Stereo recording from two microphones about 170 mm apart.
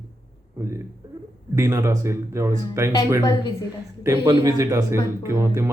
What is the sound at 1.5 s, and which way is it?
Speech, 15° right (ahead or behind).